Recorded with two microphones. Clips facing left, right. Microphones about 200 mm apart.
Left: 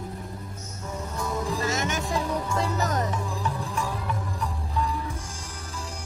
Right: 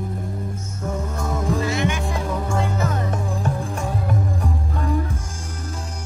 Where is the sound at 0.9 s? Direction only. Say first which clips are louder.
Right 4 dB; 50° right (ahead or behind).